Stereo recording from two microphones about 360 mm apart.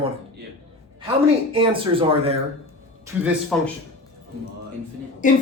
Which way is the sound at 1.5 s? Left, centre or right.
Centre.